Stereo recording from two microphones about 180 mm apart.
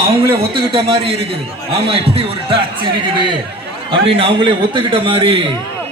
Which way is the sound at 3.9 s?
30° right (ahead or behind).